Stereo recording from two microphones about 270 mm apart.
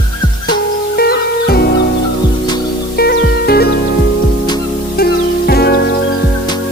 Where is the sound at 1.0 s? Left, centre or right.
Left.